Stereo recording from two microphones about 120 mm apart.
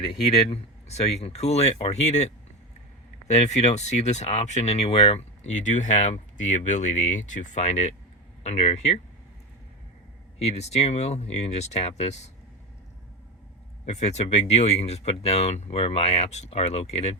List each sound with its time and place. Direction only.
0.1 s speech: 50° left (ahead or behind)
10.3 s speech: 60° left (ahead or behind)
13.8 s speech: 70° left (ahead or behind)